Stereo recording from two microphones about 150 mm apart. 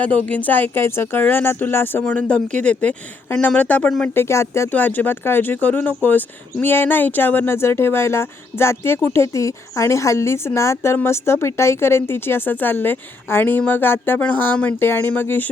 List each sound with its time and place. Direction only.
0.3 s speech: 10° left (ahead or behind)